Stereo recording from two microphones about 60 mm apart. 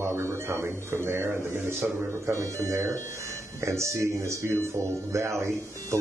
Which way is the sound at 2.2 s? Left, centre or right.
Right.